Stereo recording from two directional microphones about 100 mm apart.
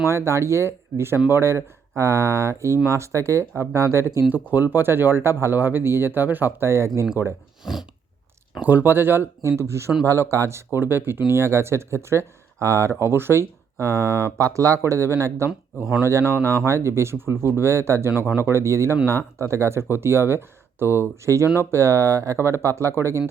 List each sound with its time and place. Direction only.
0.0 s speech: 25° right (ahead or behind)
7.6 s a sound: 5° right (ahead or behind)
8.6 s speech: 20° right (ahead or behind)